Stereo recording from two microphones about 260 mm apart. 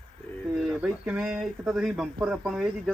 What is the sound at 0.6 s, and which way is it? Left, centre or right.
Speech, centre.